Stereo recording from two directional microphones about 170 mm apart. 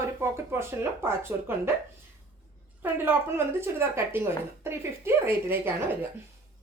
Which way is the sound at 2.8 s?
10° right (ahead or behind).